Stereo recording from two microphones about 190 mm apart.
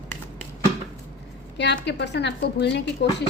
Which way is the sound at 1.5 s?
65° left (ahead or behind).